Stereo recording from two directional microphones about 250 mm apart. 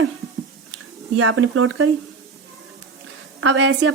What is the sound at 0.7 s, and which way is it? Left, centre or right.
Speech, right.